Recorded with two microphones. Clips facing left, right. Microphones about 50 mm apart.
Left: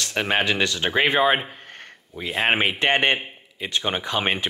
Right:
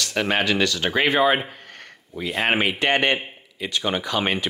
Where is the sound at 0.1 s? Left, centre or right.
Centre.